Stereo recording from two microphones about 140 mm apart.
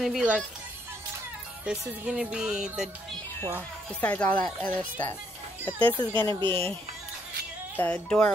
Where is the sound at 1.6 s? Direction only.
5° right (ahead or behind).